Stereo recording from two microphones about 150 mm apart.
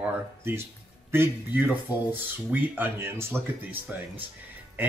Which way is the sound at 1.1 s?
15° right (ahead or behind).